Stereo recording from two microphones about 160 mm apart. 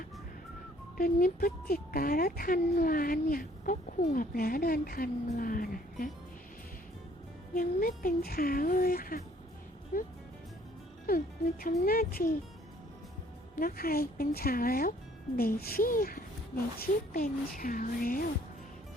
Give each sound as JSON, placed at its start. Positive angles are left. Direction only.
{"t": 0.9, "sound": "speech", "side_deg": 65}
{"t": 7.5, "sound": "speech", "side_deg": 65}
{"t": 11.6, "sound": "speech", "side_deg": 65}
{"t": 13.6, "sound": "a woman's voice", "side_deg": 65}
{"t": 17.2, "sound": "speech", "side_deg": 55}